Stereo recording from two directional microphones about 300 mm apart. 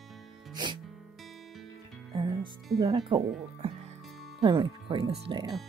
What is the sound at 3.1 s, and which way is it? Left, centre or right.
Speech, centre.